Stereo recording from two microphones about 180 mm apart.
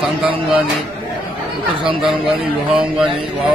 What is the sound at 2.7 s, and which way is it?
Speech, 5° right (ahead or behind).